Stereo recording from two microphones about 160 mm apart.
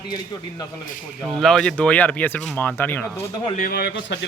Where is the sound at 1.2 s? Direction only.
5° left (ahead or behind).